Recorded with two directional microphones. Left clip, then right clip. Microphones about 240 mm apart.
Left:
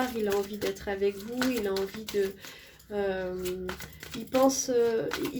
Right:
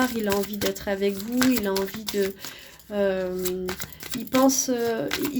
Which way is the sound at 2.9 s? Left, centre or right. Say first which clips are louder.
Right 6 dB; right.